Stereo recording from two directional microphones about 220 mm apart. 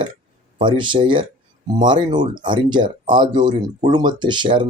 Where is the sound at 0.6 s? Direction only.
20° right (ahead or behind).